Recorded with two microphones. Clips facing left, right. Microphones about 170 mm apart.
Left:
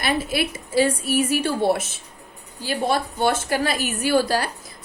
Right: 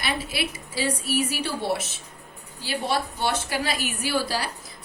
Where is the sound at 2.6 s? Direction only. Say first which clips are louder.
Left 4 dB; 50° left (ahead or behind).